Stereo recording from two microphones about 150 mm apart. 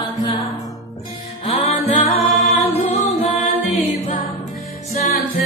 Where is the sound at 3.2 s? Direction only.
50° left (ahead or behind).